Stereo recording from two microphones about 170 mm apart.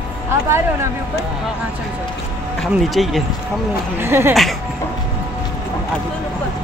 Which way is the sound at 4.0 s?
15° right (ahead or behind).